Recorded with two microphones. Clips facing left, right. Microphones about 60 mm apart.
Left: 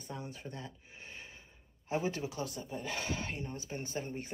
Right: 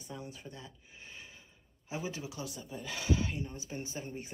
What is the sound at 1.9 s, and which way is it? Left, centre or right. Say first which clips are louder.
Speech: left 5 dB; left.